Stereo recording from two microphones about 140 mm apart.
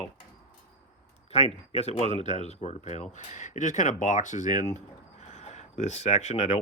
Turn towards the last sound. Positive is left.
turn(degrees=55)  # may be behind; listen again after turning